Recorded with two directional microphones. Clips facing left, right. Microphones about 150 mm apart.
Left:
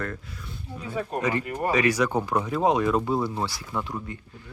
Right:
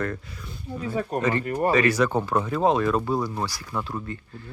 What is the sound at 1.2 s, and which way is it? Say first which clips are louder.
Speech: right 3 dB; 10° left (ahead or behind).